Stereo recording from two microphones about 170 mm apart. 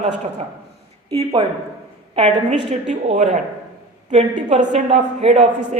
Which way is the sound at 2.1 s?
35° right (ahead or behind).